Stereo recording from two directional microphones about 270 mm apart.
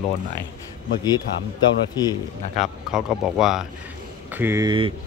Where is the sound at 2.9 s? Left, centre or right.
Centre.